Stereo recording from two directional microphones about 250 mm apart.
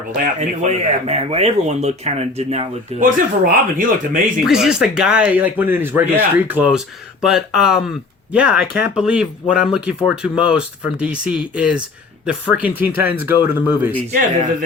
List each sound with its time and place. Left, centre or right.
0.1 s speech: right
4.4 s speech: centre
14.1 s speech: right